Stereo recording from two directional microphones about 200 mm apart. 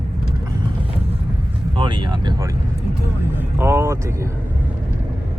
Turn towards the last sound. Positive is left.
turn(degrees=-15)  # may be behind; listen again after turning